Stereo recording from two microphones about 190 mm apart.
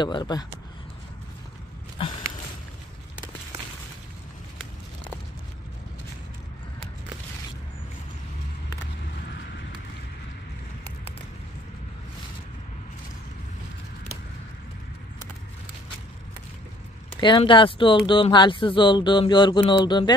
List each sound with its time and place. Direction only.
0.0 s speech: 25° left (ahead or behind)
17.2 s speech: 25° left (ahead or behind)